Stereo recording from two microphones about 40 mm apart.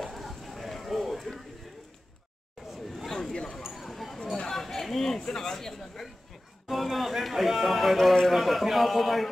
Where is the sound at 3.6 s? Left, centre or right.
Centre.